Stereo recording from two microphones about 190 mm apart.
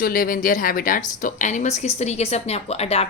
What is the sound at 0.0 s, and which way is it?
A woman's voice, 50° left (ahead or behind).